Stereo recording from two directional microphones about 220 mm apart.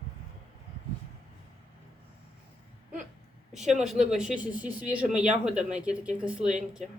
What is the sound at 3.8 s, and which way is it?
Speech, centre (ahead or behind).